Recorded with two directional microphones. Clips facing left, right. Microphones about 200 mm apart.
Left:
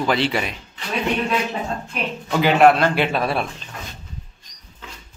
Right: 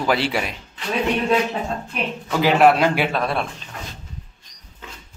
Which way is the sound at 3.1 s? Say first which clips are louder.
Left 1 dB; 5° left (ahead or behind).